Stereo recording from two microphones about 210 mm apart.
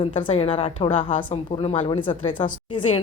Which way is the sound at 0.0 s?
25° left (ahead or behind).